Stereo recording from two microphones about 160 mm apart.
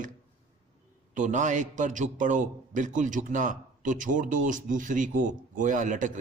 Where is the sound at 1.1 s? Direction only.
50° right (ahead or behind).